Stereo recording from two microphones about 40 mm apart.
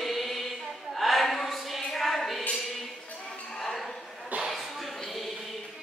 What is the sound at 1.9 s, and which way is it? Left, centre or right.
Tambourine, centre.